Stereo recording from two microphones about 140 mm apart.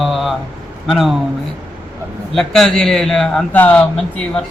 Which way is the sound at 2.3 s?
Centre (ahead or behind).